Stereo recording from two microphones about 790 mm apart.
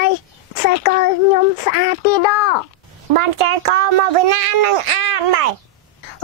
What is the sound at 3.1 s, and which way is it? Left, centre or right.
A child's voice, right.